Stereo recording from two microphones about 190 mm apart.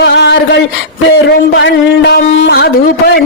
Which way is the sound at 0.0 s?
70° left (ahead or behind).